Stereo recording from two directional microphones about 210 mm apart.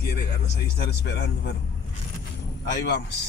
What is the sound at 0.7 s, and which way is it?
Speech, 50° left (ahead or behind).